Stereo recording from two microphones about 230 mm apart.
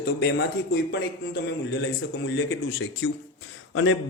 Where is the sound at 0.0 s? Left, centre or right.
Left.